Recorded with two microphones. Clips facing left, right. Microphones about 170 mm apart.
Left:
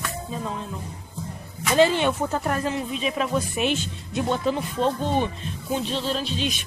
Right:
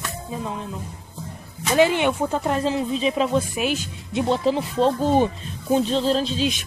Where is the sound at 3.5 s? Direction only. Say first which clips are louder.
Even; 5° right (ahead or behind).